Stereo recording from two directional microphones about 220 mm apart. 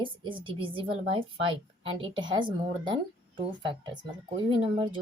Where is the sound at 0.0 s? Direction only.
20° right (ahead or behind).